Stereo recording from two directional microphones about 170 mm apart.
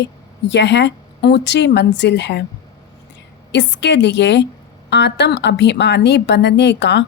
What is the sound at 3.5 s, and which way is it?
A woman's voice, 90° left.